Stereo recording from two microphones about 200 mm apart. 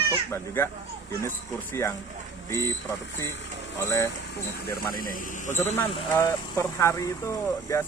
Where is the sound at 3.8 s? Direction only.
15° left (ahead or behind).